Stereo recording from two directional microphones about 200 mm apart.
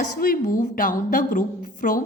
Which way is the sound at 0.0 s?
45° left (ahead or behind).